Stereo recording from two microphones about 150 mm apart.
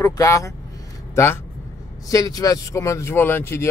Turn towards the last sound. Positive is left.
turn(degrees=15)  # may be behind; listen again after turning